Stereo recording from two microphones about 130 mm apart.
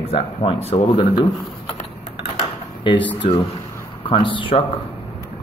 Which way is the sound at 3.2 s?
45° left (ahead or behind).